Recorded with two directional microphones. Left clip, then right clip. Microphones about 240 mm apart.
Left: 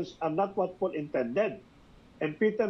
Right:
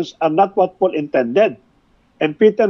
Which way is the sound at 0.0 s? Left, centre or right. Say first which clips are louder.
Right 15 dB; right.